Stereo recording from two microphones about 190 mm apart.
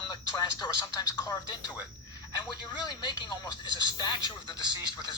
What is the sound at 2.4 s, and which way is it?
Speech, 20° left (ahead or behind).